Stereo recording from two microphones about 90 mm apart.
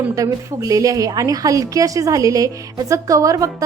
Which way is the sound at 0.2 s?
40° right (ahead or behind).